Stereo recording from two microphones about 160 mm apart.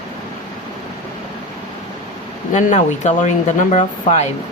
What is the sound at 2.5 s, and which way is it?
Speech, 50° left (ahead or behind).